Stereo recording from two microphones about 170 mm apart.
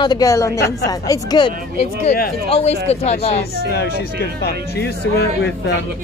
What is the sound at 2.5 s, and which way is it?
Speech, 40° left (ahead or behind).